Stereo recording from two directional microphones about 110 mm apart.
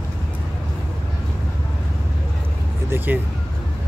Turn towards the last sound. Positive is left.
turn(degrees=-20)  # may be behind; listen again after turning